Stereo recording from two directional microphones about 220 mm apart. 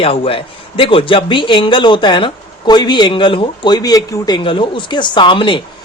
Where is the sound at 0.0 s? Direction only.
25° left (ahead or behind).